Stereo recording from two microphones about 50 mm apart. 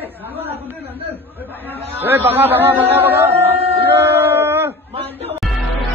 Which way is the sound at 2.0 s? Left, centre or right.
Right.